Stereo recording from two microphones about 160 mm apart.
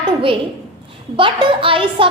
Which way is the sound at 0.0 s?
35° right (ahead or behind).